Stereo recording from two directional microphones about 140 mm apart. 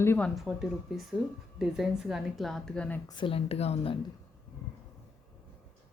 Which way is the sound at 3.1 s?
35° left (ahead or behind).